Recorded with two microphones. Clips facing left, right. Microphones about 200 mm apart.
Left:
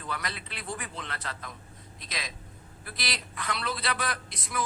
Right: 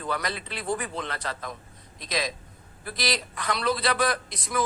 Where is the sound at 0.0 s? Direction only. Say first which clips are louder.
Right 6 dB; 40° right (ahead or behind).